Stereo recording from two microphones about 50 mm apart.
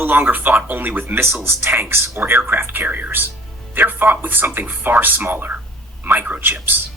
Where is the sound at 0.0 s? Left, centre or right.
Right.